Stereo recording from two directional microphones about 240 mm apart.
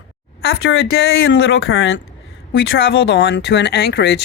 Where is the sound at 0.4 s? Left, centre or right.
Left.